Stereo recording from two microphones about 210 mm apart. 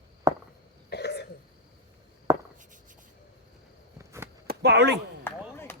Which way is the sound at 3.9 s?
15° right (ahead or behind).